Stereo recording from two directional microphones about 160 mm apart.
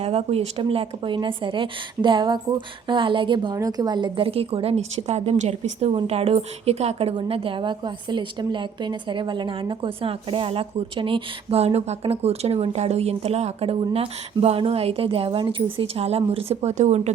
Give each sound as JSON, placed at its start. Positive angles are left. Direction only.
{"t": 0.0, "sound": "speech", "side_deg": -40}